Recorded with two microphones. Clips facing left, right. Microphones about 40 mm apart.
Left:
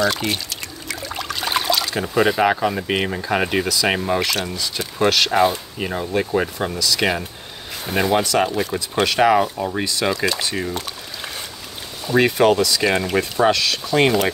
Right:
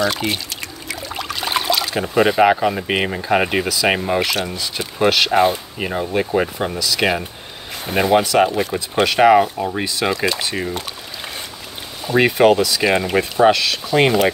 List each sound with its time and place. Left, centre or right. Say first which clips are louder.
0.0 s speech: right 1 dB; centre
0.8 s pour: even; centre
2.5 s speech: right 2 dB; centre
12.2 s speech: right 2 dB; centre